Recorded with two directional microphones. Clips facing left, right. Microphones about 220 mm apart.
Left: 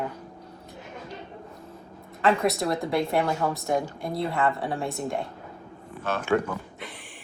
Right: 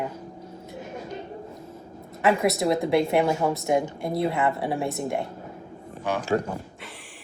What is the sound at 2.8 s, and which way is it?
Speech, 20° right (ahead or behind).